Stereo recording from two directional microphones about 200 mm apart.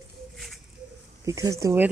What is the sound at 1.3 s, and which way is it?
Speech, 15° right (ahead or behind).